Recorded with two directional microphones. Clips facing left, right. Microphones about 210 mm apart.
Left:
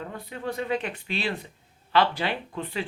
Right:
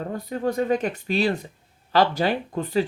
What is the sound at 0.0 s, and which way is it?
Speech, 40° right (ahead or behind).